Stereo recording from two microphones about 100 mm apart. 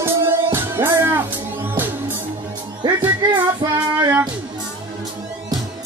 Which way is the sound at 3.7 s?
45° right (ahead or behind).